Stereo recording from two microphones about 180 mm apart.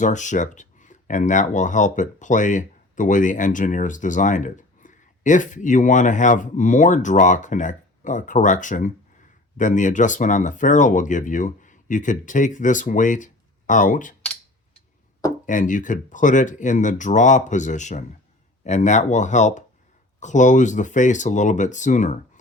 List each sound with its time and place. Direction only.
0.0 s speech: 45° left (ahead or behind)
15.4 s speech: 45° left (ahead or behind)